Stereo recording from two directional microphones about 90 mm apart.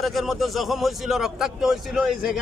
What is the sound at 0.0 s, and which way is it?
A man's voice, centre (ahead or behind).